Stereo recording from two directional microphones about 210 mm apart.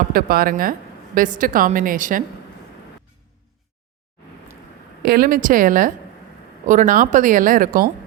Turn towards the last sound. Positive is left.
turn(degrees=-40)  # may be behind; listen again after turning